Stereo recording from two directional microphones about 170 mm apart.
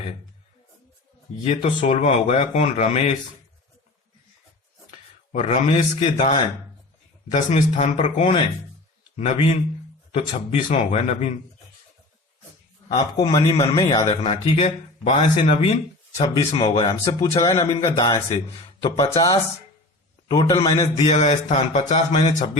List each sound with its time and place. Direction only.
1.5 s speech: 40° left (ahead or behind)
4.9 s a sound: 45° left (ahead or behind)
5.6 s speech: 35° left (ahead or behind)
12.9 s a man's voice: 35° left (ahead or behind)
14.3 s a man's voice: 35° left (ahead or behind)
20.7 s speech: 35° left (ahead or behind)